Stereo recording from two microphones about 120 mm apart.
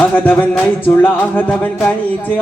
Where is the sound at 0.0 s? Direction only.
15° left (ahead or behind).